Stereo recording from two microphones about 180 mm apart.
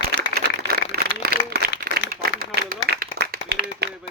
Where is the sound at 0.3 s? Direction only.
60° right (ahead or behind).